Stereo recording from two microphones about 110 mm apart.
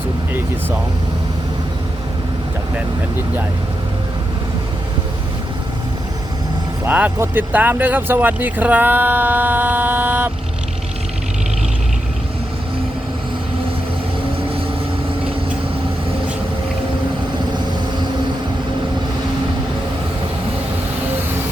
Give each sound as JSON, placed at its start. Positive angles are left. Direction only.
{"t": 6.8, "sound": "speech", "side_deg": -15}